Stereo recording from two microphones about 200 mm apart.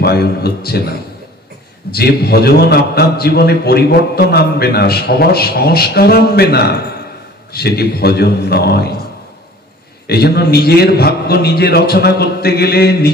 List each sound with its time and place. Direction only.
0.0 s a man's voice: 55° left (ahead or behind)
1.9 s a man's voice: 50° left (ahead or behind)
10.0 s a man's voice: 50° left (ahead or behind)